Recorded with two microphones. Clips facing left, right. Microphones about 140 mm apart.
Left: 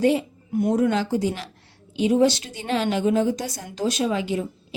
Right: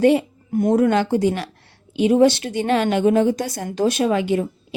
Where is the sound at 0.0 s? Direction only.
65° right (ahead or behind).